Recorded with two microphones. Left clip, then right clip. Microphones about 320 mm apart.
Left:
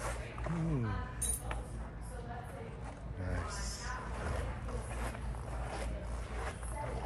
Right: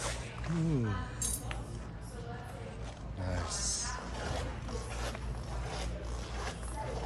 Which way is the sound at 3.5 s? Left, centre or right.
Centre.